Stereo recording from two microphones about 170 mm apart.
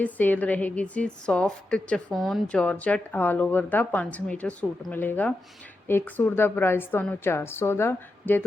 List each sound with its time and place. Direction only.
0.0 s a woman's voice: 10° left (ahead or behind)